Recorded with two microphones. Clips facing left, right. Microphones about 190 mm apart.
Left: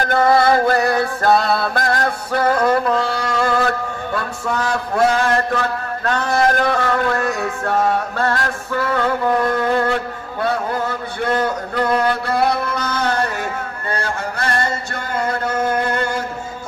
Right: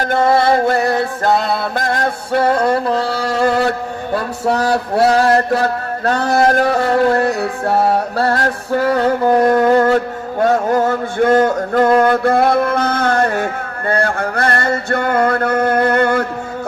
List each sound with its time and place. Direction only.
0.1 s music: 25° right (ahead or behind)
4.1 s male singing: 35° right (ahead or behind); by 16.2 s 60° right (ahead or behind)